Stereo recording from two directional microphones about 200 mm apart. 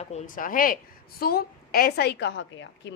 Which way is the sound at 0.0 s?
35° left (ahead or behind).